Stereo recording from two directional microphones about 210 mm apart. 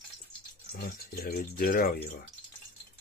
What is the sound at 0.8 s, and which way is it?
Speech, 45° left (ahead or behind).